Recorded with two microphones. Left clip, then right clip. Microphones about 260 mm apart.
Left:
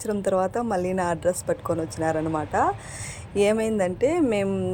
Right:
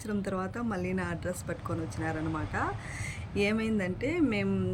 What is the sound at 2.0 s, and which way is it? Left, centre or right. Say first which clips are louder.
Speech: left 9 dB; left.